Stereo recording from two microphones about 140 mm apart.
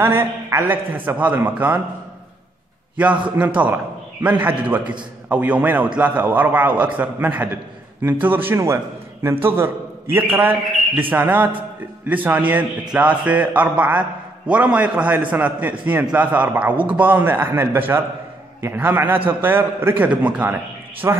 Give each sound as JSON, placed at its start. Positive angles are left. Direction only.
{"t": 0.0, "sound": "a man's voice", "side_deg": -15}
{"t": 3.0, "sound": "a man's voice", "side_deg": -10}